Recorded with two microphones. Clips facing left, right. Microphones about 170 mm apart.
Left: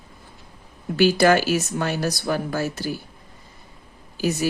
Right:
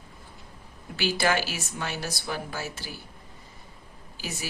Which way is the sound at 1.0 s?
45° left (ahead or behind).